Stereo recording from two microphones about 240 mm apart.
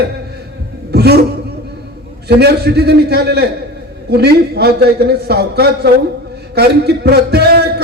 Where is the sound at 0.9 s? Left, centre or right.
Right.